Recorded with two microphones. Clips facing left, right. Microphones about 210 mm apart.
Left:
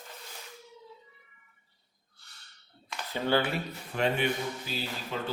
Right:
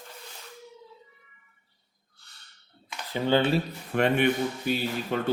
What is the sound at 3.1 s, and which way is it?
Speech, 20° right (ahead or behind).